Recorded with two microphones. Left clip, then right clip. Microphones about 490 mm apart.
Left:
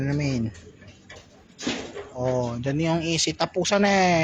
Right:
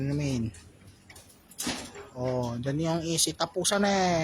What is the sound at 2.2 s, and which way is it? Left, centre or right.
Speech, right.